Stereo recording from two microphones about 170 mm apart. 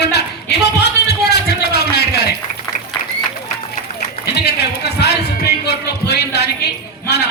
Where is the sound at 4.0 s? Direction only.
70° left (ahead or behind).